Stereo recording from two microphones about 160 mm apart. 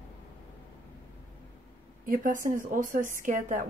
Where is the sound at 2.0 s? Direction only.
55° right (ahead or behind).